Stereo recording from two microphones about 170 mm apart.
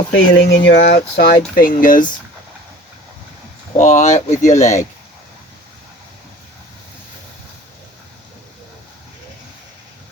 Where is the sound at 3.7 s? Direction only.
45° left (ahead or behind).